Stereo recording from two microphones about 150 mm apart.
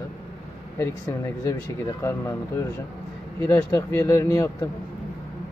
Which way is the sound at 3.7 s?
20° left (ahead or behind).